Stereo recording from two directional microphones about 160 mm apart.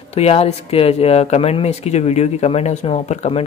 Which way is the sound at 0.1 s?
40° left (ahead or behind).